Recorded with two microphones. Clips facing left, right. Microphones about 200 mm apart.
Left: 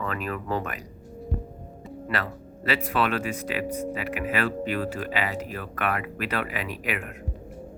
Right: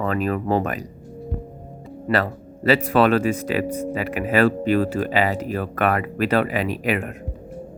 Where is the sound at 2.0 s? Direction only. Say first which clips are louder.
Right 9 dB; 35° right (ahead or behind).